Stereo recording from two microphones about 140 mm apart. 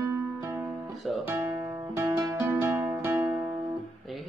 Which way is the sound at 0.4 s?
20° right (ahead or behind).